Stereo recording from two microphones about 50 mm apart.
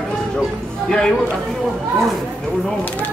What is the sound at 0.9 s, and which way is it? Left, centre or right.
Speech, centre.